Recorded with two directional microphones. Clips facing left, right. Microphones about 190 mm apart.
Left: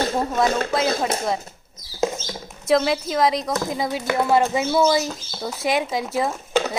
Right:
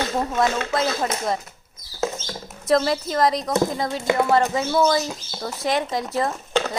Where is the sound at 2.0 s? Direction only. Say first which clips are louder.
Left 3 dB; 15° left (ahead or behind).